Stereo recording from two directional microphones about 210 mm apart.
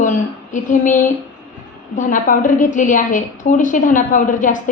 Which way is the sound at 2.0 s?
40° left (ahead or behind).